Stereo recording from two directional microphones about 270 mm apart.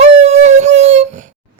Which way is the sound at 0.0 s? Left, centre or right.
Right.